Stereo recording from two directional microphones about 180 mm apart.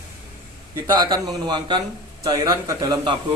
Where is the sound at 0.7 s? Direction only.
20° right (ahead or behind).